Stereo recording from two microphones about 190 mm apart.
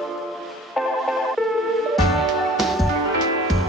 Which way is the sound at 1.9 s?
Centre (ahead or behind).